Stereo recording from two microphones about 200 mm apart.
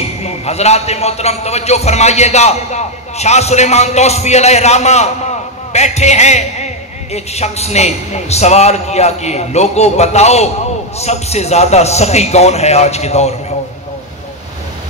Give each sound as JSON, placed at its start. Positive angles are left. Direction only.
{"t": 0.2, "sound": "a man's voice", "side_deg": 30}